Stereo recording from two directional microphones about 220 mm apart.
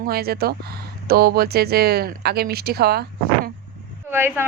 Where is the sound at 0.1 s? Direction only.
45° right (ahead or behind).